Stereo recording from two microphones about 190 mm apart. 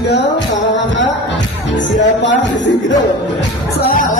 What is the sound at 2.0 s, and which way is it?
Speech, 70° left (ahead or behind).